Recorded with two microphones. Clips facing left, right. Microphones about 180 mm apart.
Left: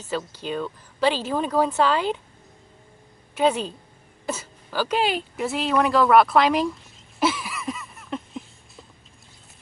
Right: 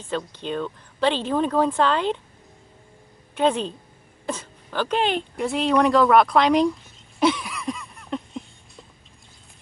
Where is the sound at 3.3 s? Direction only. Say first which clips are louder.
Even; 5° left (ahead or behind).